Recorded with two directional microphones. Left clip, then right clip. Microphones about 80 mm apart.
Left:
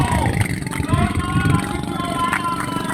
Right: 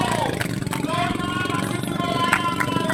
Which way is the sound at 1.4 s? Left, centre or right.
Centre.